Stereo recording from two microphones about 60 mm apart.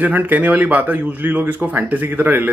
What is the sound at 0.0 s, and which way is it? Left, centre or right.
Speech, right.